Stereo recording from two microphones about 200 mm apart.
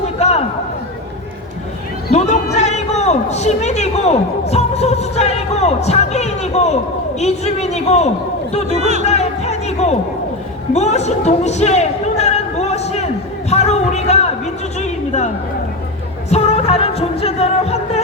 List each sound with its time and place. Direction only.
0.2 s a sound: 35° left (ahead or behind)
2.1 s a man's voice: 35° left (ahead or behind)
8.7 s speech: 35° right (ahead or behind)
9.0 s speech: 35° left (ahead or behind)
10.8 s a sound: 35° left (ahead or behind)
16.3 s music: 30° left (ahead or behind)